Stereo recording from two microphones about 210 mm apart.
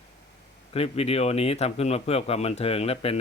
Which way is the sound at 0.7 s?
30° left (ahead or behind).